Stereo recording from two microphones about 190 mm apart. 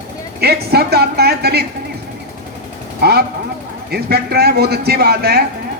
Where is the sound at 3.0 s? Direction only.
55° right (ahead or behind).